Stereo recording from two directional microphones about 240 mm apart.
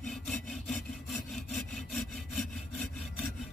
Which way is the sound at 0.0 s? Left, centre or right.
Centre.